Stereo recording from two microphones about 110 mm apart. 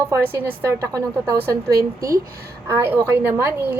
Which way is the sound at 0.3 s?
20° right (ahead or behind).